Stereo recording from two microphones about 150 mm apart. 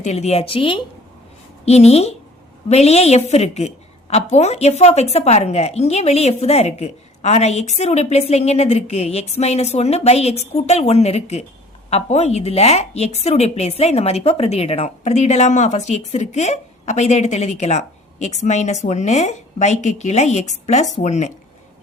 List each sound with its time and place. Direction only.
0.0 s a woman's voice: 50° left (ahead or behind)